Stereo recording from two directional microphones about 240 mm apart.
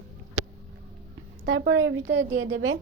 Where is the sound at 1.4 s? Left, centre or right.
Right.